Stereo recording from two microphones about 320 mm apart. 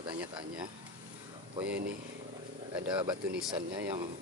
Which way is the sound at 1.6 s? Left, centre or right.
Right.